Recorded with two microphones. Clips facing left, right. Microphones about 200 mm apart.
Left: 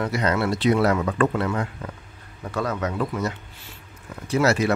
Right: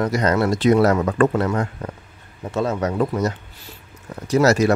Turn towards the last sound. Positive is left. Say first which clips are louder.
# right 5 dB
turn(degrees=-40)  # may be behind; listen again after turning